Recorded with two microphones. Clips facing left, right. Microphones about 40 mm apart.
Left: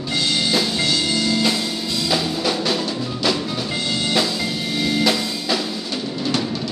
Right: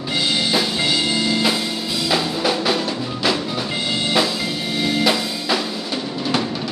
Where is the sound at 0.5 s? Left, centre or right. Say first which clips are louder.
Right 1 dB; centre.